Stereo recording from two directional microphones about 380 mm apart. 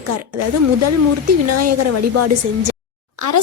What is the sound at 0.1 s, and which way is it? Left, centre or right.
A woman's voice, right.